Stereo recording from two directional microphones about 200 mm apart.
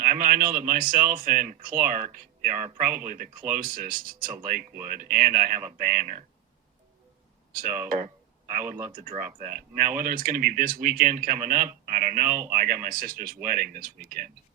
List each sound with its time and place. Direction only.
0.0 s speech: 45° right (ahead or behind)
7.5 s speech: 45° right (ahead or behind)